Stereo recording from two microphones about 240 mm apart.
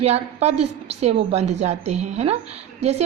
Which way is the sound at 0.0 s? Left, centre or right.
Right.